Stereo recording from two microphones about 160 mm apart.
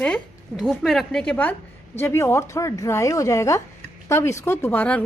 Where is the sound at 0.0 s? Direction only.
5° left (ahead or behind).